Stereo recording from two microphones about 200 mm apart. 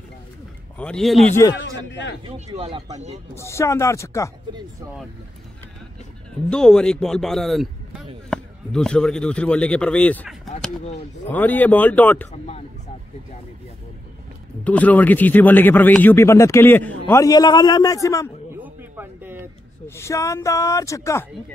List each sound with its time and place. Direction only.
0.7 s speech: 5° left (ahead or behind)
1.5 s a man's voice: 65° left (ahead or behind)
2.2 s speech: 35° right (ahead or behind)
3.3 s a man's voice: 15° left (ahead or behind)
6.5 s a man's voice: 5° left (ahead or behind)
12.3 s speech: 35° left (ahead or behind)
14.6 s a man's voice: 5° left (ahead or behind)
18.6 s a sound: 10° right (ahead or behind)
20.0 s a man's voice: 15° left (ahead or behind)